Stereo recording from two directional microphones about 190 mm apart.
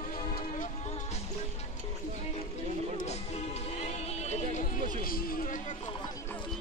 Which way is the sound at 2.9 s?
35° left (ahead or behind).